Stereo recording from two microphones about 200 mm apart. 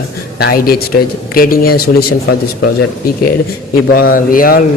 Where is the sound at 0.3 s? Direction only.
50° left (ahead or behind).